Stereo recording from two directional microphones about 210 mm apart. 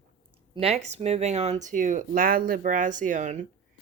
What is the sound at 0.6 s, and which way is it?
Speech, 30° right (ahead or behind).